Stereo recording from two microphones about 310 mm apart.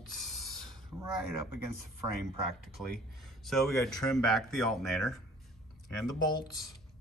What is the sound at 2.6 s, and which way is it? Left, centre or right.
Speech, centre.